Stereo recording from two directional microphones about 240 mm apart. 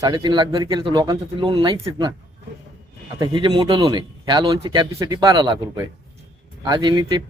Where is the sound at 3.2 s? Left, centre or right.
Centre.